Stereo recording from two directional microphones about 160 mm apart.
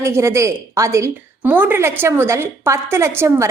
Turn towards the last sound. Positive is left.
turn(degrees=-15)  # may be behind; listen again after turning